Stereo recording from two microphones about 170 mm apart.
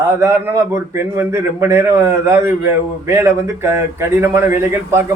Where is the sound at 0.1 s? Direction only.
15° right (ahead or behind).